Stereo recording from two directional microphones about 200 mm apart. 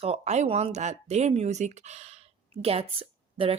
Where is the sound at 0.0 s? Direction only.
30° right (ahead or behind).